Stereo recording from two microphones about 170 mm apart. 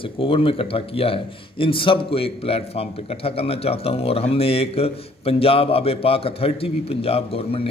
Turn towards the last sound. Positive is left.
turn(degrees=35)  # may be behind; listen again after turning